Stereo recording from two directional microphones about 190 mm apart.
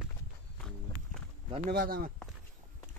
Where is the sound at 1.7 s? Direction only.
50° right (ahead or behind).